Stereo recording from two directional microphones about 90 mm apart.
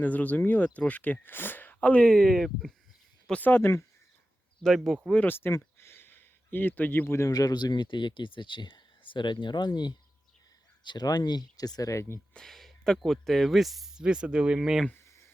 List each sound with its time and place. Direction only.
0.0 s speech: 15° left (ahead or behind); by 2.7 s centre (ahead or behind)
3.2 s speech: 15° left (ahead or behind)
4.6 s speech: centre (ahead or behind)
5.1 s speech: 20° left (ahead or behind)
5.5 s a sound: 30° left (ahead or behind)
7.3 s speech: 45° left (ahead or behind)
12.3 s speech: 5° left (ahead or behind)
14.9 s a sound: 35° left (ahead or behind)